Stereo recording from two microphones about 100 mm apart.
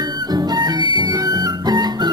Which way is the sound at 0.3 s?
45° right (ahead or behind).